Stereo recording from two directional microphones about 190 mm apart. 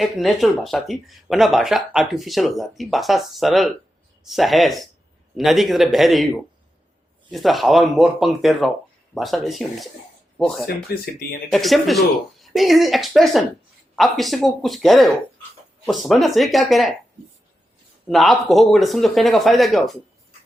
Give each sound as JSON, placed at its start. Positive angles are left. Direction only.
{"t": 0.0, "sound": "speech", "side_deg": 0}
{"t": 7.3, "sound": "speech", "side_deg": 0}
{"t": 10.8, "sound": "speech", "side_deg": 55}
{"t": 11.5, "sound": "speech", "side_deg": 0}
{"t": 18.1, "sound": "speech", "side_deg": 0}